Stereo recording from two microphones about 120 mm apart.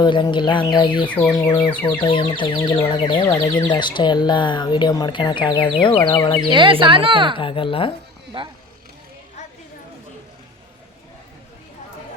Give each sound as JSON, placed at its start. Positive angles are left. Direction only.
{"t": 0.0, "sound": "speech", "side_deg": 40}
{"t": 1.3, "sound": "speech", "side_deg": 30}
{"t": 1.7, "sound": "speech", "side_deg": 15}
{"t": 2.0, "sound": "speech", "side_deg": 45}
{"t": 6.5, "sound": "speech", "side_deg": -45}
{"t": 7.3, "sound": "speech", "side_deg": 45}
{"t": 8.3, "sound": "speech", "side_deg": -45}